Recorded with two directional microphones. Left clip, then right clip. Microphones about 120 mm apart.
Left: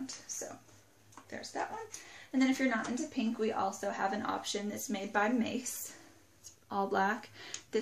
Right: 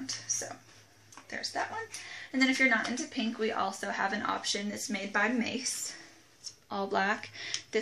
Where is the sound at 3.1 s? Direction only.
5° left (ahead or behind).